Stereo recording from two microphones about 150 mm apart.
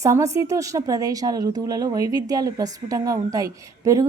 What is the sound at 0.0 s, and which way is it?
Speech, 20° right (ahead or behind).